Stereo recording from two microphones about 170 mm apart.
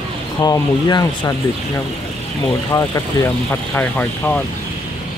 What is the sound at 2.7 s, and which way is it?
Speech, 25° left (ahead or behind).